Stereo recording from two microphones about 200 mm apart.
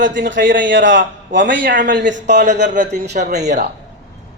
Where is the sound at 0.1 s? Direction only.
65° right (ahead or behind).